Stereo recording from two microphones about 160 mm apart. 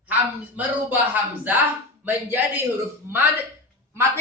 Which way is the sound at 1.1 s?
10° right (ahead or behind).